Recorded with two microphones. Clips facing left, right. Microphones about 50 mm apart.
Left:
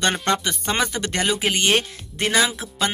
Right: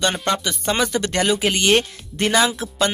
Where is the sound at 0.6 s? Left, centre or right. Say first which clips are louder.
Right 3 dB; centre.